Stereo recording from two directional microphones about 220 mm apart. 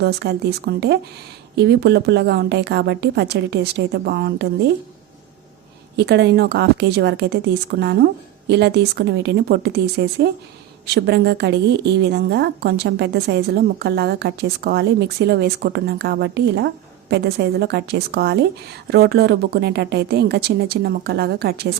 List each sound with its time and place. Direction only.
0.0 s a woman's voice: 45° right (ahead or behind)
6.0 s a woman's voice: 50° right (ahead or behind)